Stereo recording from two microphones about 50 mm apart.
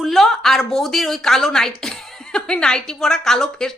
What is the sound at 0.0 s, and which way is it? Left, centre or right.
A woman's voice, centre.